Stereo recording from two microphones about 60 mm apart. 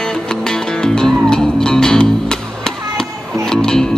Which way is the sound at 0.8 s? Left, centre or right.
Centre.